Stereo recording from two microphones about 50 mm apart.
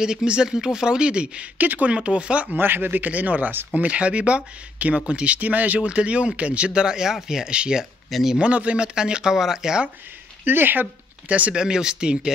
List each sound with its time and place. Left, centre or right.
0.0 s speech: centre
1.6 s speech: right
2.0 s speech: right
2.5 s speech: right; by 7.8 s centre
8.1 s speech: centre
8.4 s speech: right
10.4 s speech: right
11.2 s speech: right
11.5 s speech: centre